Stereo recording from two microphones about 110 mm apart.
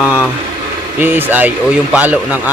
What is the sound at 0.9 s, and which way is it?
Speech, 15° right (ahead or behind).